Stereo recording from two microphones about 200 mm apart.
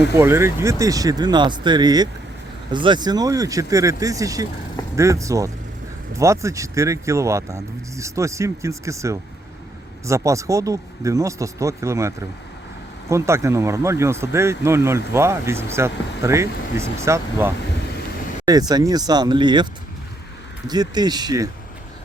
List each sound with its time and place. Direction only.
0.2 s speech: 10° right (ahead or behind)
20.7 s speech: 20° right (ahead or behind)